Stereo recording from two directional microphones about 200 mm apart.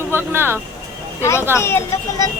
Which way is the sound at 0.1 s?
10° right (ahead or behind).